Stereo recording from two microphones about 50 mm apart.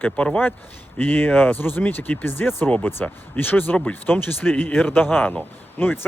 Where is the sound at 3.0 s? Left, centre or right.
Left.